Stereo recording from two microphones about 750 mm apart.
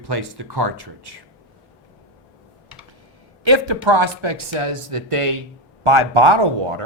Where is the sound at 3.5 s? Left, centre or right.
Right.